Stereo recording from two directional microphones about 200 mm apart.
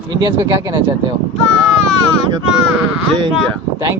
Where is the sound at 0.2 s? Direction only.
25° right (ahead or behind).